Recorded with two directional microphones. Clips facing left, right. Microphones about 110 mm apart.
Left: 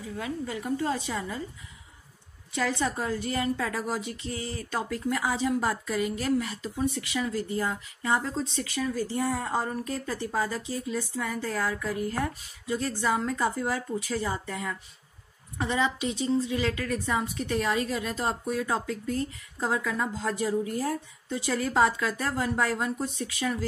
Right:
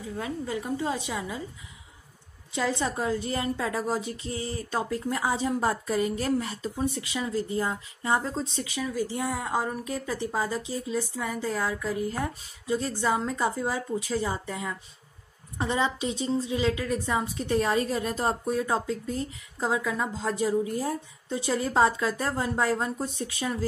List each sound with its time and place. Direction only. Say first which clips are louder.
0.0 s a woman's voice: right 1 dB; 25° right (ahead or behind)
2.5 s a woman's voice: even; 25° right (ahead or behind)